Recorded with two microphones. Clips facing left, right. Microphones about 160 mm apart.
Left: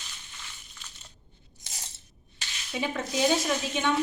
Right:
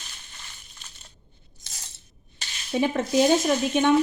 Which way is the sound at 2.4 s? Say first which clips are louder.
Right 8 dB; 45° right (ahead or behind).